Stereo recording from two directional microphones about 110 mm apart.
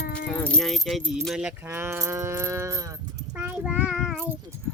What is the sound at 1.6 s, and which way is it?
Speech, 20° right (ahead or behind).